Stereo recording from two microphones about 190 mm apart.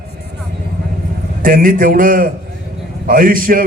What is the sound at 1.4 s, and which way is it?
A man's voice, 50° right (ahead or behind).